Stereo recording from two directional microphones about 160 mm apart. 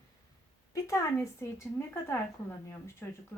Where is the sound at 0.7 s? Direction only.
20° left (ahead or behind).